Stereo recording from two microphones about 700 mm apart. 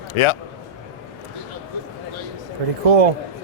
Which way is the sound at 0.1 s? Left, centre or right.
Left.